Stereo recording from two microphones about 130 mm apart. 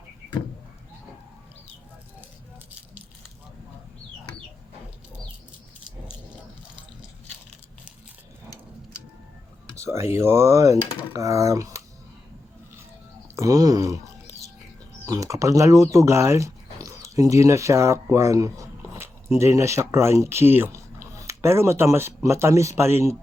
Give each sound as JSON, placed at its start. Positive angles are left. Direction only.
{"t": 9.7, "sound": "speech", "side_deg": -20}
{"t": 13.3, "sound": "a sound", "side_deg": -25}
{"t": 15.0, "sound": "speech", "side_deg": -25}